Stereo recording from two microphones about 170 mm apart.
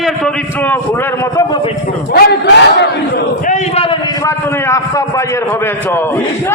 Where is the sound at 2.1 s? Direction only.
75° left (ahead or behind).